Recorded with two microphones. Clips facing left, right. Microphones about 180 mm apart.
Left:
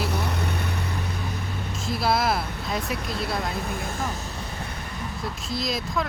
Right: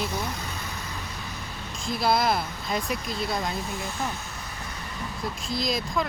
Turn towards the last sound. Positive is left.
turn(degrees=0)  # may be behind; listen again after turning